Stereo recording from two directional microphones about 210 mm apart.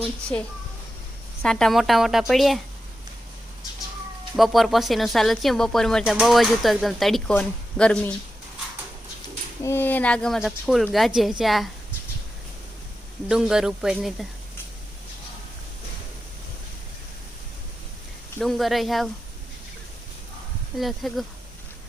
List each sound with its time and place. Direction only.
0.0 s speech: 5° left (ahead or behind)
4.4 s speech: centre (ahead or behind)
9.6 s speech: 10° left (ahead or behind)
13.2 s speech: 5° right (ahead or behind)
18.3 s speech: centre (ahead or behind)
20.7 s speech: centre (ahead or behind)